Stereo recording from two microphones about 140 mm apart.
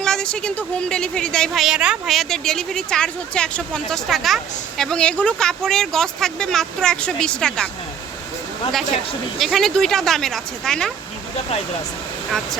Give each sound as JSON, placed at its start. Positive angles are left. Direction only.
{"t": 0.0, "sound": "speech", "side_deg": 5}
{"t": 9.4, "sound": "speech", "side_deg": 0}